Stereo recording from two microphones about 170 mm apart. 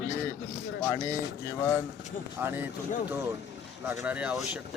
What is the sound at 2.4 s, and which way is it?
Speech, 10° right (ahead or behind).